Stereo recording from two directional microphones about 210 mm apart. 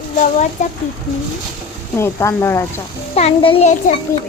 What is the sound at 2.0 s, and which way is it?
Speech, 10° left (ahead or behind).